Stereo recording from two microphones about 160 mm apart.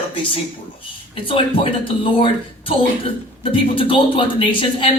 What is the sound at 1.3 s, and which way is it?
Speech, 35° left (ahead or behind).